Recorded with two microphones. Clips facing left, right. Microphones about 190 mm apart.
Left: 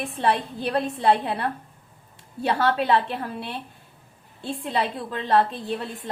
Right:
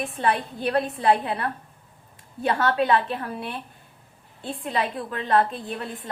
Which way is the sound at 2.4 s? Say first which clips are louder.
Even; 30° left (ahead or behind).